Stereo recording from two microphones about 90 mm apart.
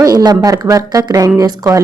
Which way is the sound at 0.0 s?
50° right (ahead or behind).